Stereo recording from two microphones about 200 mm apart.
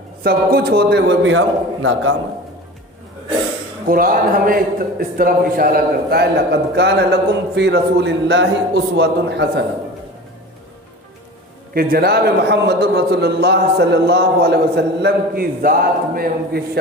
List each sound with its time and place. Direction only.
0.2 s a man's voice: 50° right (ahead or behind); by 2.1 s 80° right
3.8 s a man's voice: 45° right (ahead or behind)
11.7 s a man's voice: 50° right (ahead or behind)